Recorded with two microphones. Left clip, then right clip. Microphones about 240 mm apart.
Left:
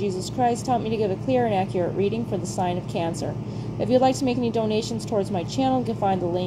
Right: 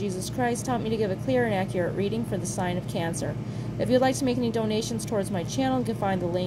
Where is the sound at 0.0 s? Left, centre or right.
Right.